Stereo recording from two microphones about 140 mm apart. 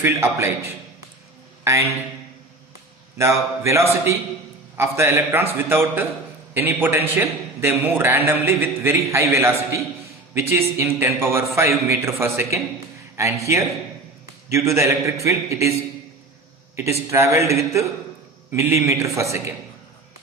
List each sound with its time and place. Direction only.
0.0 s a man's voice: 20° right (ahead or behind)
3.2 s a man's voice: 20° right (ahead or behind)
16.7 s a man's voice: 20° right (ahead or behind)
18.7 s a man's voice: 20° right (ahead or behind)